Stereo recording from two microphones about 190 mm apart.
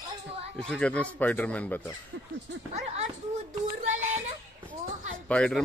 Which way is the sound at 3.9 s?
40° right (ahead or behind).